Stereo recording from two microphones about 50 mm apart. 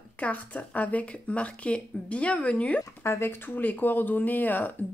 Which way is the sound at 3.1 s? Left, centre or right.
Left.